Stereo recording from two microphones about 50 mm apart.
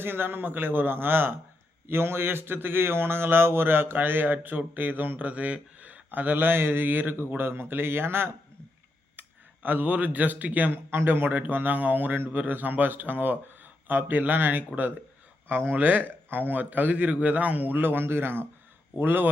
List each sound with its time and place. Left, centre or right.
0.0 s speech: right
5.3 s speech: right
9.6 s speech: right